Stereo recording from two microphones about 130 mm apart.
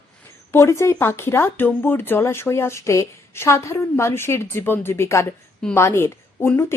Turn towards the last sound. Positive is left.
turn(degrees=20)  # may be behind; listen again after turning